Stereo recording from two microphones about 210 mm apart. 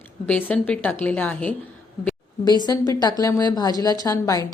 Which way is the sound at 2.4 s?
20° left (ahead or behind).